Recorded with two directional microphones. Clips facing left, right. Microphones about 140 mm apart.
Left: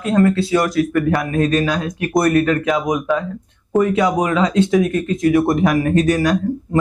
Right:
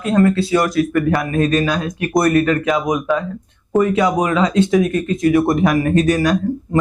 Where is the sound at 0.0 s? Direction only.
10° right (ahead or behind).